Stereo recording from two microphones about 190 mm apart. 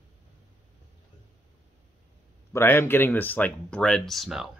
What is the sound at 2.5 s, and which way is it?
Speech, 10° left (ahead or behind).